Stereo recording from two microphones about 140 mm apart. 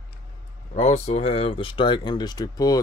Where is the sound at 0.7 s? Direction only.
50° left (ahead or behind).